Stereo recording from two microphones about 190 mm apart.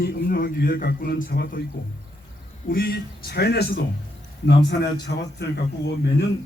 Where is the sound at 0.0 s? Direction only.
55° left (ahead or behind).